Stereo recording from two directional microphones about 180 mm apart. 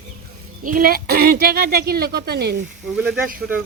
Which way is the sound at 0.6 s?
50° right (ahead or behind).